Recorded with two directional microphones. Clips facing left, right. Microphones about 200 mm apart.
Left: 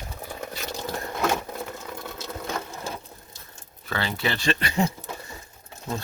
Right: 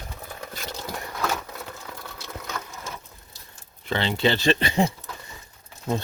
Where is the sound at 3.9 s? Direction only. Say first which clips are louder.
Right 5 dB; 25° right (ahead or behind).